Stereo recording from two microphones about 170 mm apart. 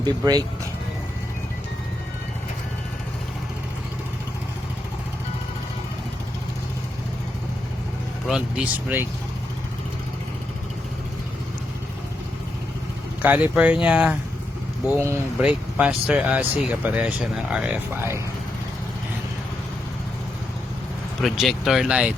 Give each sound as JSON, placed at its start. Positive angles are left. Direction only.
{"t": 0.0, "sound": "speech", "side_deg": -25}
{"t": 8.3, "sound": "speech", "side_deg": -5}
{"t": 13.2, "sound": "speech", "side_deg": -10}
{"t": 21.2, "sound": "speech", "side_deg": 0}